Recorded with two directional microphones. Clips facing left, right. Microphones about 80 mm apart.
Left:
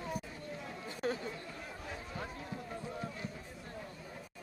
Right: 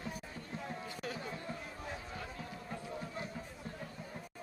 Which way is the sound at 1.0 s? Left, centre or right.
Left.